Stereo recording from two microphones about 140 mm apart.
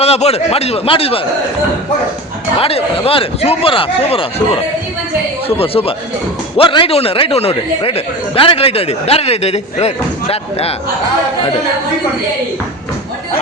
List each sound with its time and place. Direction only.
0.0 s speech: 45° left (ahead or behind)
2.6 s speech: 45° left (ahead or behind)
5.5 s speech: 45° left (ahead or behind)